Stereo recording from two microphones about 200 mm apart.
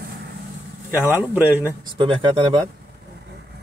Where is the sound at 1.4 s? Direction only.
10° right (ahead or behind).